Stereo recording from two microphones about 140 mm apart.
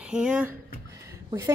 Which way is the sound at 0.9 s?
20° right (ahead or behind).